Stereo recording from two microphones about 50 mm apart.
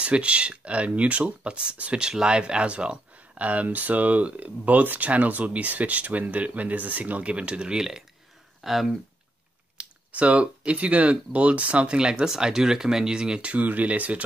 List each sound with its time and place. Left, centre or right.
0.0 s speech: right
7.7 s speech: centre
9.8 s speech: right